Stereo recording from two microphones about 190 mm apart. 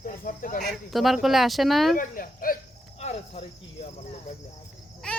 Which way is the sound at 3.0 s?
35° left (ahead or behind).